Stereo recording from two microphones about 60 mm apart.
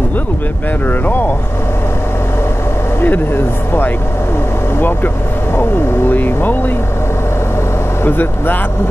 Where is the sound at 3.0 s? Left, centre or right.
Left.